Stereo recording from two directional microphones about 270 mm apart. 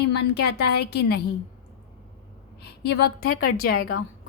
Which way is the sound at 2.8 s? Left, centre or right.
Left.